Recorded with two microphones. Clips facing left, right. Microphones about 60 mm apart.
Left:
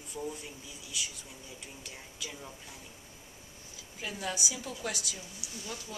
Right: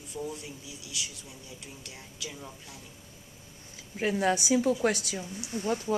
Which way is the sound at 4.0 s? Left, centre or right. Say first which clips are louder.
Right 10 dB; right.